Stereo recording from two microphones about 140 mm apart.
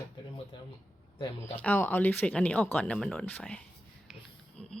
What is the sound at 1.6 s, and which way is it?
Speech, 10° left (ahead or behind).